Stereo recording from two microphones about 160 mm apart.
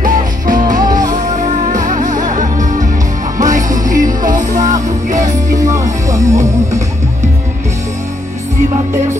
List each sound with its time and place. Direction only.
0.0 s music: 55° right (ahead or behind)
5.6 s music: 20° right (ahead or behind)